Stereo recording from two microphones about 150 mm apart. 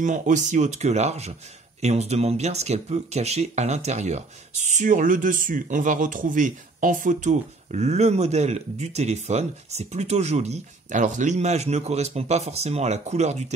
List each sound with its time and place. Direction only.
0.0 s speech: 55° right (ahead or behind)